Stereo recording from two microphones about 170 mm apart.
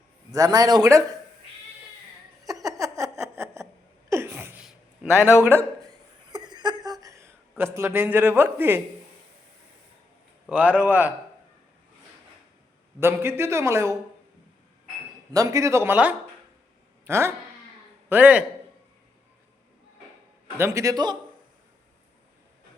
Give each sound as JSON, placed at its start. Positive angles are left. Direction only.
{"t": 0.3, "sound": "speech", "side_deg": -20}
{"t": 2.5, "sound": "a sound", "side_deg": -20}
{"t": 4.1, "sound": "sneeze", "side_deg": -15}
{"t": 5.2, "sound": "a man's voice", "side_deg": 15}
{"t": 6.3, "sound": "a sound", "side_deg": -25}
{"t": 7.0, "sound": "a man's voice", "side_deg": -15}
{"t": 10.4, "sound": "speech", "side_deg": -10}
{"t": 13.0, "sound": "speech", "side_deg": -15}
{"t": 15.3, "sound": "speech", "side_deg": -20}
{"t": 20.6, "sound": "speech", "side_deg": -15}